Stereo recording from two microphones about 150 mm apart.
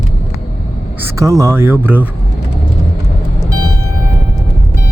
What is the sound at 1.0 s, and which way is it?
Speech, 20° right (ahead or behind).